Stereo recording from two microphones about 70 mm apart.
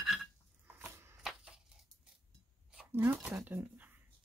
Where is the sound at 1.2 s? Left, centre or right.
Centre.